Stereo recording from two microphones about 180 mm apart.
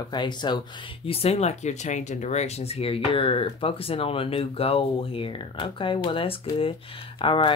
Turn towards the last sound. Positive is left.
turn(degrees=30)  # may be behind; listen again after turning